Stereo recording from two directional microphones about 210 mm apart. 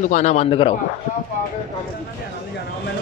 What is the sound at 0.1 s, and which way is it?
Speech, 35° left (ahead or behind).